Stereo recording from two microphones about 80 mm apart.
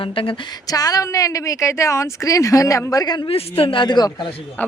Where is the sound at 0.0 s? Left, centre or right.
Left.